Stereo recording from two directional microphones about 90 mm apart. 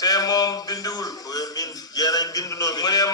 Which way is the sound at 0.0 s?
45° left (ahead or behind).